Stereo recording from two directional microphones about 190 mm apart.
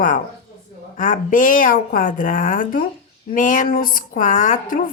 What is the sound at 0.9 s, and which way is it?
Speech, 45° left (ahead or behind).